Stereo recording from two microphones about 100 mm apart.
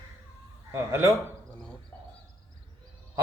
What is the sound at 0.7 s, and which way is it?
Speech, 30° right (ahead or behind).